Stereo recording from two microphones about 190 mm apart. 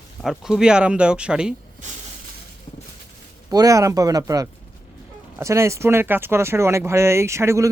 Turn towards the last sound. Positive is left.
turn(degrees=-15)  # may be behind; listen again after turning